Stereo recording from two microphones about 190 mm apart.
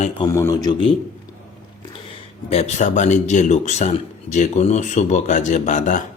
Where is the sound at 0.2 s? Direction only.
15° left (ahead or behind).